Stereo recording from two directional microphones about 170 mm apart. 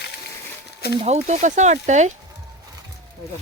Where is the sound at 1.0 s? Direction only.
40° right (ahead or behind).